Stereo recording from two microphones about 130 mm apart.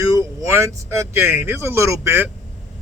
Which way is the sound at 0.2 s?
20° right (ahead or behind).